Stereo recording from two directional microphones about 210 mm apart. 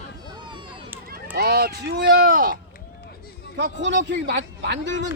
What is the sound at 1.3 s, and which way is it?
Speech, 50° right (ahead or behind).